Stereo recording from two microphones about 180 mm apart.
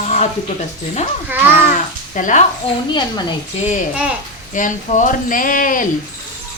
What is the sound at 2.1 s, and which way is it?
Speech, 45° left (ahead or behind).